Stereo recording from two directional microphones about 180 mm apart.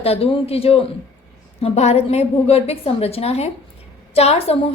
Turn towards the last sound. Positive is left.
turn(degrees=35)  # may be behind; listen again after turning